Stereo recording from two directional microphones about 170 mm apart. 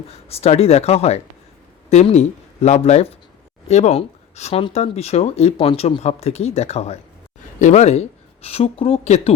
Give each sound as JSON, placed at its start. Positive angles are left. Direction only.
{"t": 0.1, "sound": "speech", "side_deg": 35}